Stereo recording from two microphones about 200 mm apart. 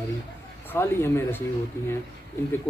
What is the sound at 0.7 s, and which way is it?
Speech, 10° left (ahead or behind).